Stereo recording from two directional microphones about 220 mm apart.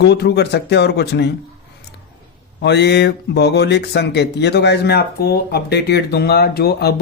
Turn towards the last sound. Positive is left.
turn(degrees=45)  # may be behind; listen again after turning